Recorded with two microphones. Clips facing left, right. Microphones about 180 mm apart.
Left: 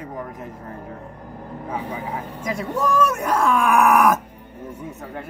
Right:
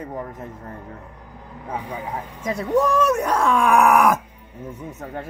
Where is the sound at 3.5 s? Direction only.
25° right (ahead or behind).